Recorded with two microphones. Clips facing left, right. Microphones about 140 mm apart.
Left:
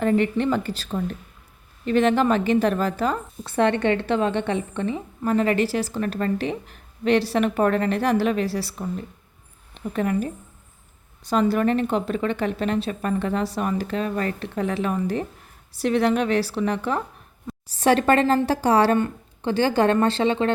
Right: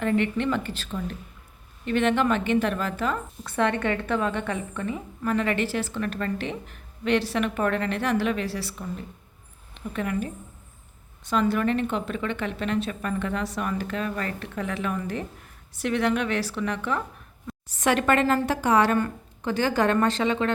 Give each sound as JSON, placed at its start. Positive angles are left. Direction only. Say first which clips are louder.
{"t": 0.0, "sound": "a woman's voice", "louder": "left 4 dB", "side_deg": 35}
{"t": 9.9, "sound": "a woman's voice", "louder": "left 5 dB", "side_deg": 35}